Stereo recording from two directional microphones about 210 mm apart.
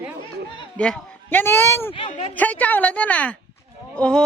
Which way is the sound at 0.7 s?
5° left (ahead or behind).